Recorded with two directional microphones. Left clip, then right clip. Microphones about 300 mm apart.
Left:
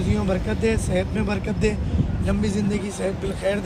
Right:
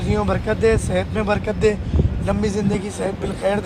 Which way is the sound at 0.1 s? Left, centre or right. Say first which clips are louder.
Right 6 dB; centre.